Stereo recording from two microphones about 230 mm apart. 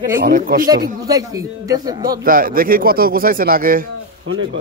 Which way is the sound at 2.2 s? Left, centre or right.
Right.